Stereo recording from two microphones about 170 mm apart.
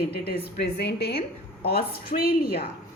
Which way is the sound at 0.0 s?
70° left (ahead or behind).